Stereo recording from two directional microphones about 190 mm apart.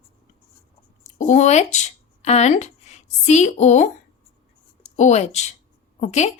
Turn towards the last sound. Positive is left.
turn(degrees=35)  # may be behind; listen again after turning